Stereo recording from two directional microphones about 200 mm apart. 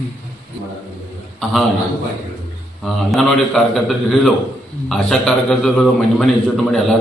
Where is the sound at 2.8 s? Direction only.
Centre (ahead or behind).